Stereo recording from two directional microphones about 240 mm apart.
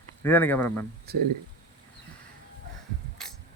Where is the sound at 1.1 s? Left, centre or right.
Right.